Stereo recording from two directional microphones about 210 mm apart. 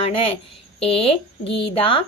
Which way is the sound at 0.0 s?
25° left (ahead or behind).